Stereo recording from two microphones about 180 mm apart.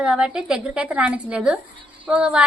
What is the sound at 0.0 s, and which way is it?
A woman's voice, 5° right (ahead or behind).